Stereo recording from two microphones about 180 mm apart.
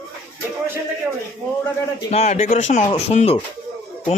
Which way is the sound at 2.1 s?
40° left (ahead or behind).